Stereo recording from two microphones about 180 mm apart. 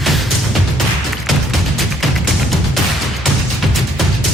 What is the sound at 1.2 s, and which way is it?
Music, centre (ahead or behind).